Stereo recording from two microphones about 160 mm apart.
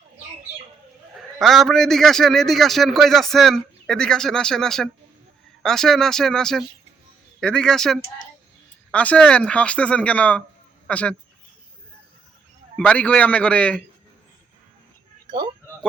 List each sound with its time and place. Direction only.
1.4 s a man's voice: centre (ahead or behind)
12.7 s speech: 10° left (ahead or behind)
15.3 s speech: 25° right (ahead or behind)